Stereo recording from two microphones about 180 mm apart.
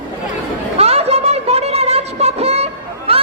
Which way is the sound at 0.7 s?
35° right (ahead or behind).